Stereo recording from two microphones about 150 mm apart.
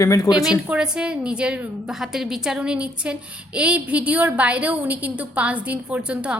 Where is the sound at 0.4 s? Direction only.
5° right (ahead or behind).